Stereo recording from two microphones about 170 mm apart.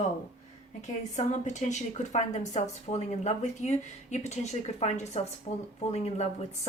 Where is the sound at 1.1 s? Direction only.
45° left (ahead or behind).